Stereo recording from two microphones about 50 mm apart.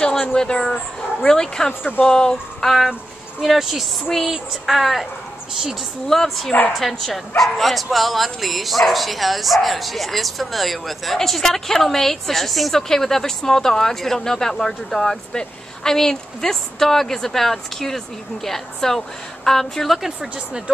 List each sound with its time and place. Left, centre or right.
0.2 s speech: centre
2.9 s a woman's voice: centre
6.0 s speech: centre
20.3 s speech: centre